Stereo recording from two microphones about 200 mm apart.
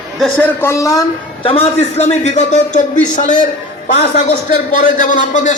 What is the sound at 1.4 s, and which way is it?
A man's voice, 30° left (ahead or behind).